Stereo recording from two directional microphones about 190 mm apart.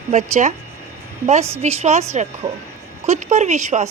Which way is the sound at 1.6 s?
35° right (ahead or behind).